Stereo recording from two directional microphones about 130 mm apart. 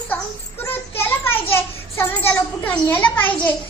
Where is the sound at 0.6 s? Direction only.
15° left (ahead or behind).